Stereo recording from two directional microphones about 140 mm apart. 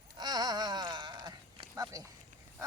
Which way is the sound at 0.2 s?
30° right (ahead or behind).